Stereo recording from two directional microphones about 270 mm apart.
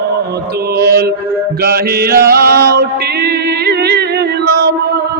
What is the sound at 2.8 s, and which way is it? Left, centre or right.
Music, right.